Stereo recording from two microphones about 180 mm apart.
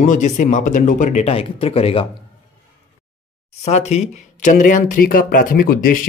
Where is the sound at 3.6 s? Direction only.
40° left (ahead or behind).